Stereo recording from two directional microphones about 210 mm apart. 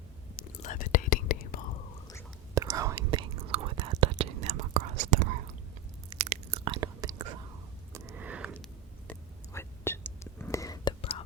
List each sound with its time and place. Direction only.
0.6 s whispering: 40° left (ahead or behind)
2.6 s whispering: 15° right (ahead or behind); by 5.3 s 35° right (ahead or behind)
6.1 s chewing: 30° right (ahead or behind)
6.7 s whispering: 15° right (ahead or behind)
7.9 s a sound: 10° right (ahead or behind)
9.0 s whispering: 10° left (ahead or behind)